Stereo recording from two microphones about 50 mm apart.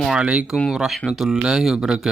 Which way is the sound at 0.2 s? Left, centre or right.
Right.